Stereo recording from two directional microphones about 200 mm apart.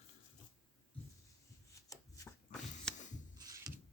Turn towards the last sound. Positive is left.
turn(degrees=5)  # may be behind; listen again after turning